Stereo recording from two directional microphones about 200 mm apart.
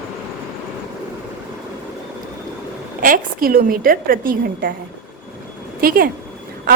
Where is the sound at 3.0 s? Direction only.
45° right (ahead or behind).